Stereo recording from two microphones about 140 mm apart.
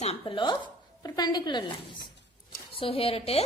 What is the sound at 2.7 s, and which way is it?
Speech, 40° left (ahead or behind).